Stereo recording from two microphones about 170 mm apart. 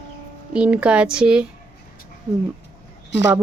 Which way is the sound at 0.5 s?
5° right (ahead or behind).